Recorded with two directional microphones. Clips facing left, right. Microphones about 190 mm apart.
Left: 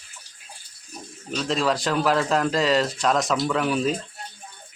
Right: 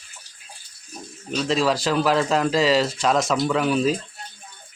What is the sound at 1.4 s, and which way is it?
Speech, centre (ahead or behind).